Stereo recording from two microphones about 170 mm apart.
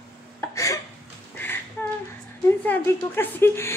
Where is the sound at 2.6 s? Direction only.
10° left (ahead or behind).